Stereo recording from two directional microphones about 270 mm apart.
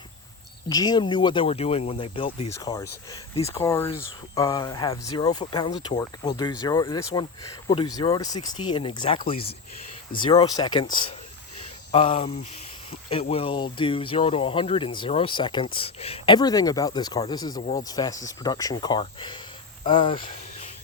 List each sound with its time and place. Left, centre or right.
0.7 s speech: centre